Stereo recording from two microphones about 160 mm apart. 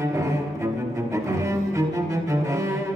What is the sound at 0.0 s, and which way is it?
Cello, 20° right (ahead or behind).